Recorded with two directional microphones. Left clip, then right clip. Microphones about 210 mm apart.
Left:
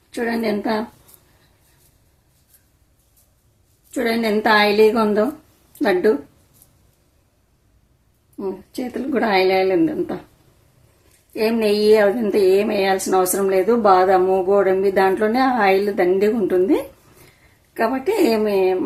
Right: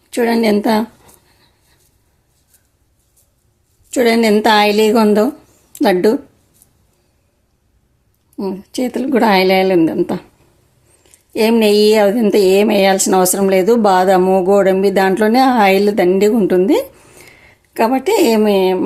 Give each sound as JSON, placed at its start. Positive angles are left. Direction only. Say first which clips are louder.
{"t": 0.1, "sound": "a woman's voice", "louder": "right 8 dB", "side_deg": -45}
{"t": 3.9, "sound": "a woman's voice", "louder": "right 8 dB", "side_deg": -40}
{"t": 8.4, "sound": "a woman's voice", "louder": "right 6 dB", "side_deg": -40}
{"t": 11.3, "sound": "a woman's voice", "louder": "right 7 dB", "side_deg": -45}